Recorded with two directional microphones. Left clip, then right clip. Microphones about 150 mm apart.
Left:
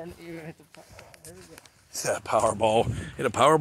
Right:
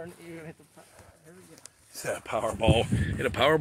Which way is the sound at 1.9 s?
35° left (ahead or behind).